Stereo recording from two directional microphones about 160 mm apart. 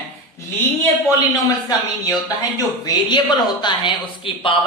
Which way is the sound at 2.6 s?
25° left (ahead or behind).